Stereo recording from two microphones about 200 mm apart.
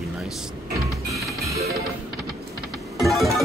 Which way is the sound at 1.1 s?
15° right (ahead or behind).